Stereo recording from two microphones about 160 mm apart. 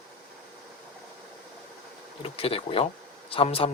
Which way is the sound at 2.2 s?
35° left (ahead or behind).